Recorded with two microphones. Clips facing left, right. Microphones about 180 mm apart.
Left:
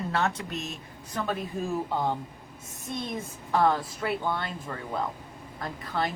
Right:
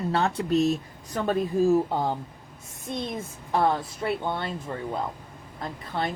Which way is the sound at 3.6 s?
25° right (ahead or behind).